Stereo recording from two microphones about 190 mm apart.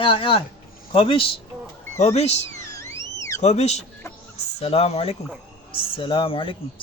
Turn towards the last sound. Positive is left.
turn(degrees=25)  # may be behind; listen again after turning